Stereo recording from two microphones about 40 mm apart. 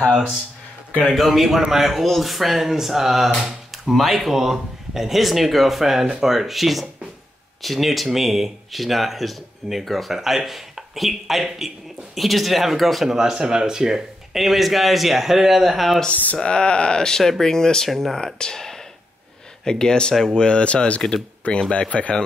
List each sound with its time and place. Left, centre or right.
1.1 s speech: centre
14.4 s speech: centre
16.4 s speech: left
17.8 s speech: centre
18.1 s speech: centre